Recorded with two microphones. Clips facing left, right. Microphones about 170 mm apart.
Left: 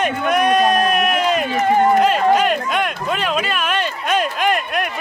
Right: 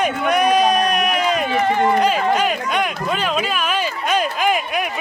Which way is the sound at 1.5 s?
40° left (ahead or behind).